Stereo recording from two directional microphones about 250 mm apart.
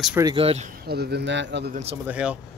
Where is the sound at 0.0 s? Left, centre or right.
Centre.